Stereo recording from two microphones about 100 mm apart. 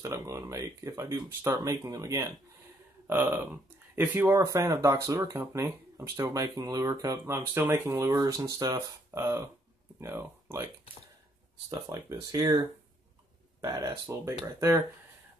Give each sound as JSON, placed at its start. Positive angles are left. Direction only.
{"t": 0.0, "sound": "speech", "side_deg": -30}
{"t": 3.1, "sound": "speech", "side_deg": -20}
{"t": 11.7, "sound": "speech", "side_deg": -35}